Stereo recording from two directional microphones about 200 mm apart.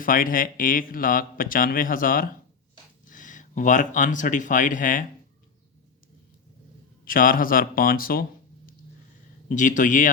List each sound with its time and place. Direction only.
0.0 s speech: 45° left (ahead or behind)
7.0 s speech: 45° left (ahead or behind)
9.5 s speech: 40° left (ahead or behind)